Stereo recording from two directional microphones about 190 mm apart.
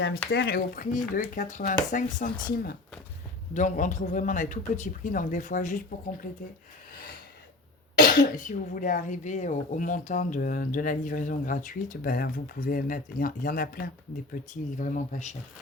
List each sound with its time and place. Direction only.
0.0 s speech: 60° left (ahead or behind); by 5.8 s 40° left (ahead or behind)
7.9 s speech: 45° left (ahead or behind)